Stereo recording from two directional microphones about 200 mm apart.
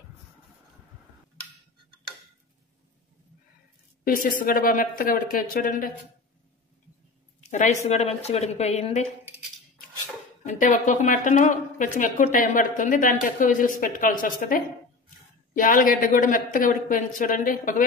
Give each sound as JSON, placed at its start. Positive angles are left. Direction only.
{"t": 4.0, "sound": "speech", "side_deg": 45}
{"t": 7.3, "sound": "speech", "side_deg": 35}
{"t": 10.4, "sound": "speech", "side_deg": 40}